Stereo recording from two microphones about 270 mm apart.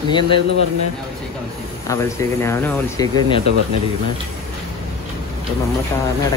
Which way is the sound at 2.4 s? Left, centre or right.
Centre.